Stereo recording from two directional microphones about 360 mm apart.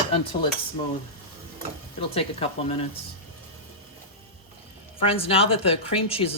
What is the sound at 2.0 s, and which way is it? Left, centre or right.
Speech, centre.